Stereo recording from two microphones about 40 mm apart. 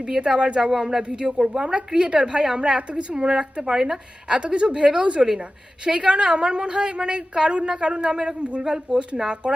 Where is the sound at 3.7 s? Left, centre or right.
Centre.